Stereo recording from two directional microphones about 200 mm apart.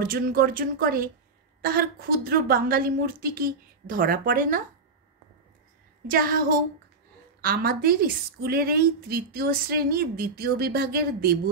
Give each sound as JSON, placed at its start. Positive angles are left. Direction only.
{"t": 0.0, "sound": "a woman's voice", "side_deg": -45}
{"t": 6.0, "sound": "a woman's voice", "side_deg": -45}
{"t": 7.4, "sound": "a woman's voice", "side_deg": -45}